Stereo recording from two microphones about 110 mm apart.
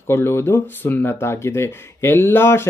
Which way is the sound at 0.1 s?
20° left (ahead or behind).